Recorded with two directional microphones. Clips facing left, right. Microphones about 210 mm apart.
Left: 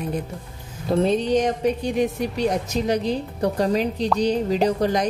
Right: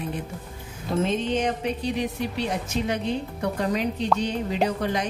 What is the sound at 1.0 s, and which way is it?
A woman's voice, 40° left (ahead or behind).